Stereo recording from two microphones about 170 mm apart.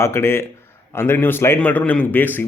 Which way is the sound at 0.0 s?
15° left (ahead or behind).